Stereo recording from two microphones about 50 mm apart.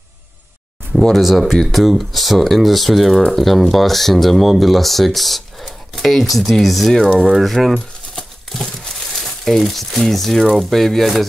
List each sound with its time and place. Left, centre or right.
1.1 s speech: centre
9.2 s speech: centre